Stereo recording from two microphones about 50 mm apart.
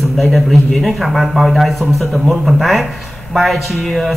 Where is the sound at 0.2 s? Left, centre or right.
Centre.